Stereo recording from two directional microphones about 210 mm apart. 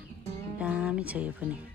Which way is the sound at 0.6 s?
5° right (ahead or behind).